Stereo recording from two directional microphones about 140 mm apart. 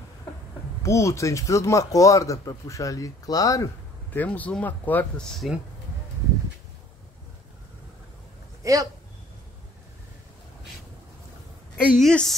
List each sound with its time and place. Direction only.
0.8 s speech: 20° left (ahead or behind)
4.1 s speech: 10° left (ahead or behind)
8.6 s speech: 25° right (ahead or behind)
11.7 s speech: 5° left (ahead or behind)